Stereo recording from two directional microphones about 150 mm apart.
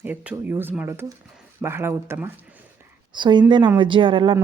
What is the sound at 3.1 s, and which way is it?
Speech, 30° right (ahead or behind).